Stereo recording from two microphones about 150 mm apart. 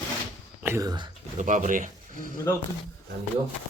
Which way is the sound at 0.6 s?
15° right (ahead or behind).